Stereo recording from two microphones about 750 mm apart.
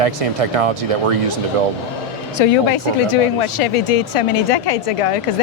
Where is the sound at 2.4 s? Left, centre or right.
Left.